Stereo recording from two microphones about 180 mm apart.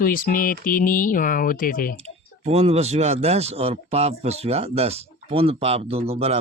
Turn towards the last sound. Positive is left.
turn(degrees=-35)  # may be behind; listen again after turning